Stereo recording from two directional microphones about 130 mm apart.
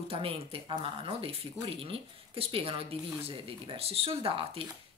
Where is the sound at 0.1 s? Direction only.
45° right (ahead or behind).